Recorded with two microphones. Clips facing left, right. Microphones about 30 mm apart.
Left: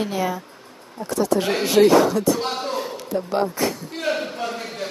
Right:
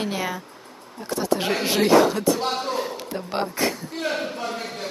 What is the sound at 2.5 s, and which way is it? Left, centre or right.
Speech, centre.